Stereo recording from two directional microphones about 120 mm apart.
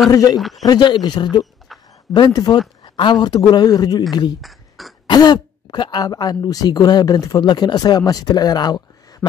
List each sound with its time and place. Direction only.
0.1 s speech: 30° left (ahead or behind)
0.4 s speech: centre (ahead or behind)
0.7 s speech: 35° left (ahead or behind)
1.7 s a sound: centre (ahead or behind)
2.1 s speech: 35° left (ahead or behind)
4.4 s a sound: centre (ahead or behind)
5.0 s speech: 35° left (ahead or behind)